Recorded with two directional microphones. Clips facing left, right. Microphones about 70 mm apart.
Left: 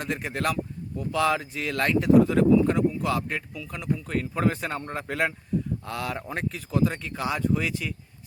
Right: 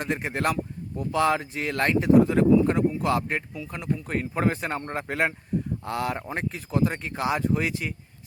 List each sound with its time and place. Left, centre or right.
0.0 s speech: right